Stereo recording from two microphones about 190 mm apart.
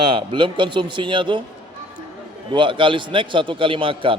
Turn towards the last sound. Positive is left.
turn(degrees=-25)  # may be behind; listen again after turning